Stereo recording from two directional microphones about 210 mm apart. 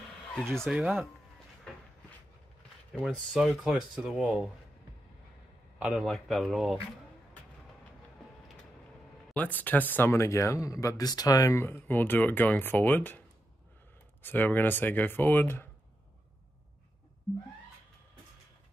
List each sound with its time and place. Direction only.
0.3 s speech: centre (ahead or behind)
2.9 s speech: centre (ahead or behind)
5.8 s speech: centre (ahead or behind)
9.3 s speech: 10° left (ahead or behind)
14.2 s speech: 10° left (ahead or behind)